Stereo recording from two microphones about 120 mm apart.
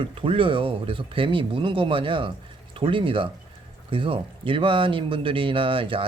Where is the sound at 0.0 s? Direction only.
45° right (ahead or behind).